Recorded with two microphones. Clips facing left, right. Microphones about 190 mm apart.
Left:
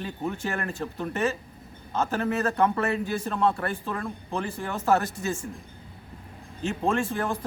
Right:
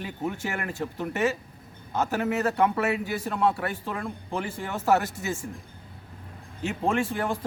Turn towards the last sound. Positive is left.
turn(degrees=-10)  # may be behind; listen again after turning